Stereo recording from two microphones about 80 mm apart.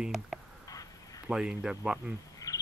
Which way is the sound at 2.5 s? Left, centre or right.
Left.